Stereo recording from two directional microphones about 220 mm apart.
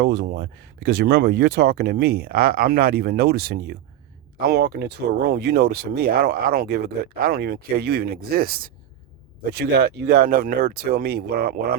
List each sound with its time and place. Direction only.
0.0 s speech: 50° right (ahead or behind)